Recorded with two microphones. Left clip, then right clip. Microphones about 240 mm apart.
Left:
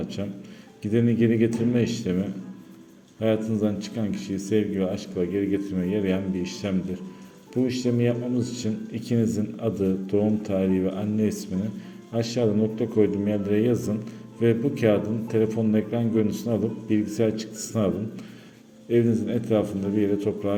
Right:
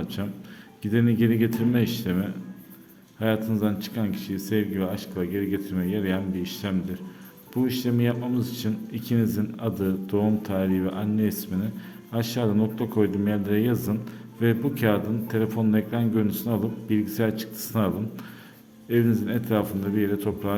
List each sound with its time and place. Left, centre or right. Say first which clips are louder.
0.8 s speech: left 1 dB; centre